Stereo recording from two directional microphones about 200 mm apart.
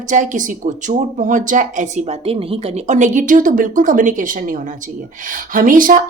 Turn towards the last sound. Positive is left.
turn(degrees=-45)  # may be behind; listen again after turning